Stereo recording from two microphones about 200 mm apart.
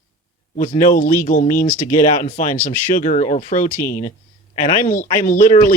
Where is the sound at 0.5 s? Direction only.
40° left (ahead or behind).